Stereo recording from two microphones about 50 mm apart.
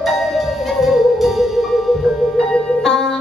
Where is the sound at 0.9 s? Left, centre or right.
Centre.